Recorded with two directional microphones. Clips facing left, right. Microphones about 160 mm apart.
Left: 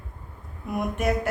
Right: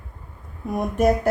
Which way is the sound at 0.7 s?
35° right (ahead or behind).